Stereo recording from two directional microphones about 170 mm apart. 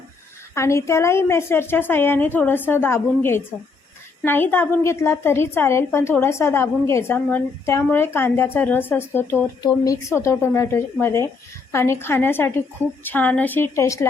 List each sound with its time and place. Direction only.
0.5 s a woman's voice: 15° left (ahead or behind)